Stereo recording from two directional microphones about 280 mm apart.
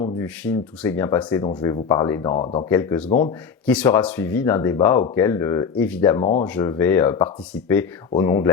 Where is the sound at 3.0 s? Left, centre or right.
Left.